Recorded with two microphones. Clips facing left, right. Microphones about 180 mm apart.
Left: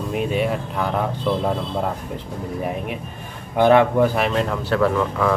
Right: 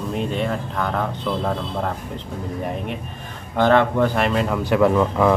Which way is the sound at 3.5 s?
10° left (ahead or behind).